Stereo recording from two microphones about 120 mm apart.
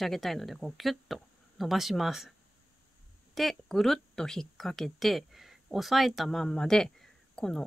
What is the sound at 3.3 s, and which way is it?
Speech, centre (ahead or behind).